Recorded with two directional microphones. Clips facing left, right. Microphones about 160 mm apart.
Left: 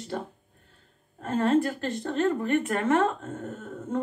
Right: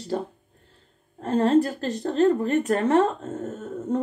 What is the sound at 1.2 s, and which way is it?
A woman's voice, 35° right (ahead or behind).